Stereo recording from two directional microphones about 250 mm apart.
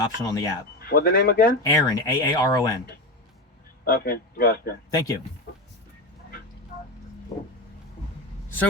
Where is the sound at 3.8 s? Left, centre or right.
Left.